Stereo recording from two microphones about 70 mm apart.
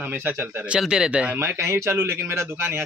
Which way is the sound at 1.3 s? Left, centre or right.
Right.